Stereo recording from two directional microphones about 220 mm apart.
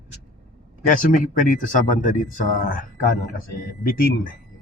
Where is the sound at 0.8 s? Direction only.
35° left (ahead or behind).